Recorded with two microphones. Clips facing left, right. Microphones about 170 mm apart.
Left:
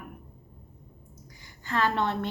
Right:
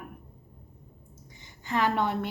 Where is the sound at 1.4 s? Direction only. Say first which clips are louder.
Right 1 dB; 15° right (ahead or behind).